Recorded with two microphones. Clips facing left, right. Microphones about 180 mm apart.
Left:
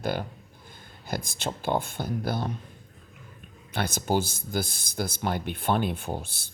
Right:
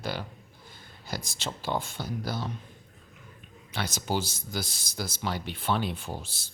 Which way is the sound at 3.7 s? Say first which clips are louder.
Left 4 dB; 55° left (ahead or behind).